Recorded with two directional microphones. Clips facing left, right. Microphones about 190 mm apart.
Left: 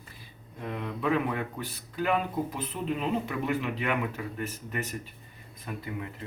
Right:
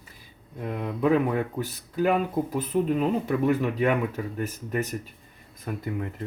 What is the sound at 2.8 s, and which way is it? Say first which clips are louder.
A man's voice: right 5 dB; 40° right (ahead or behind).